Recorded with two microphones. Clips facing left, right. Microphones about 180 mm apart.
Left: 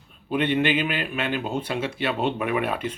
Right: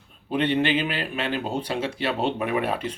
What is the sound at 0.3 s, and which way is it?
Speech, 35° right (ahead or behind).